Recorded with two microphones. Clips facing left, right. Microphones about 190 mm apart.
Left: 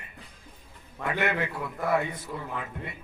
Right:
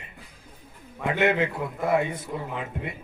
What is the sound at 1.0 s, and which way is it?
A man's voice, 20° right (ahead or behind).